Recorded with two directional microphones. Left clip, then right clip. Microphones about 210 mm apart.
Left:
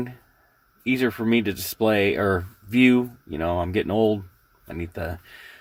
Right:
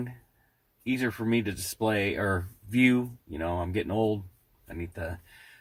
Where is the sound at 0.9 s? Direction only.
40° left (ahead or behind).